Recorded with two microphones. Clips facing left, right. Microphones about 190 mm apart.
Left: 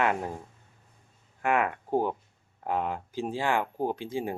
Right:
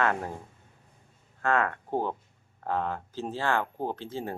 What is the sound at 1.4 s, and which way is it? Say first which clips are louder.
Speech: even; 15° left (ahead or behind).